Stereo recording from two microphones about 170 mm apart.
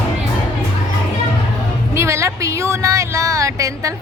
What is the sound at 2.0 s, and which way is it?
Speech, 15° right (ahead or behind).